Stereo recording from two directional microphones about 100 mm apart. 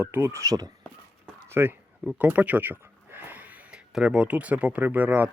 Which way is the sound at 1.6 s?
20° right (ahead or behind).